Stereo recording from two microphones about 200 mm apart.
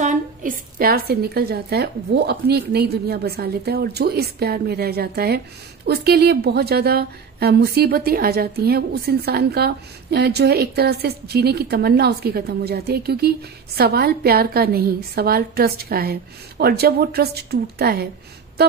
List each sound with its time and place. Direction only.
0.0 s a woman's voice: 40° right (ahead or behind)